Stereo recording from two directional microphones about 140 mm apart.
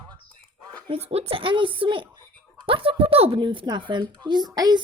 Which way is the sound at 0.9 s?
45° right (ahead or behind).